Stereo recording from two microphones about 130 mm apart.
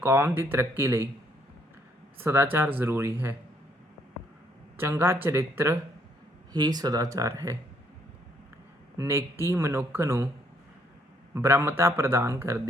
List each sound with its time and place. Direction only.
0.0 s speech: 15° right (ahead or behind)
2.1 s speech: 15° right (ahead or behind)
4.8 s speech: 15° right (ahead or behind)
6.5 s speech: 30° right (ahead or behind)
9.0 s speech: 20° right (ahead or behind)
11.3 s speech: 20° right (ahead or behind)